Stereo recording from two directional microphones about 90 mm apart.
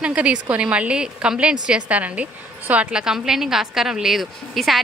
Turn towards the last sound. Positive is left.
turn(degrees=0)  # may be behind; listen again after turning